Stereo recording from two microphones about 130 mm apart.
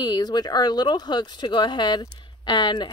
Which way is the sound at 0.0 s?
35° left (ahead or behind).